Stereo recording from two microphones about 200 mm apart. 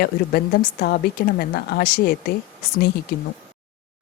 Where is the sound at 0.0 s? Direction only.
50° left (ahead or behind).